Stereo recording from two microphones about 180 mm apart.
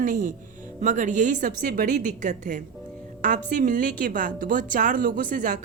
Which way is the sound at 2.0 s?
45° right (ahead or behind).